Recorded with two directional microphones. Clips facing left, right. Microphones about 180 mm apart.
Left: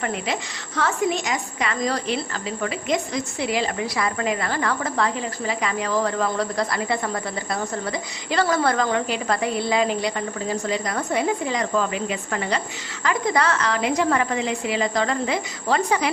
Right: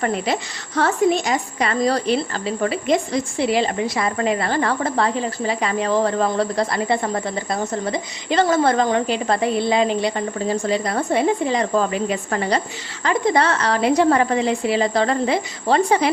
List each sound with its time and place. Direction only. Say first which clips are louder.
0.0 s a woman's voice: right 5 dB; 35° right (ahead or behind)